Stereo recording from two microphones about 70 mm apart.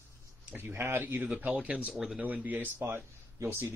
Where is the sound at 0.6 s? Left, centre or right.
Right.